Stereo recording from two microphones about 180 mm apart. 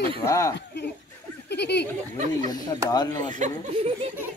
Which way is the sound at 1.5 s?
70° left (ahead or behind).